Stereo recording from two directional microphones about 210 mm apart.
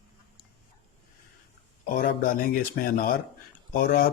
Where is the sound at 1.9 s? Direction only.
45° left (ahead or behind).